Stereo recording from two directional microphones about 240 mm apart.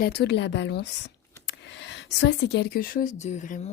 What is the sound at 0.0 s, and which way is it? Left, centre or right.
Speech, left.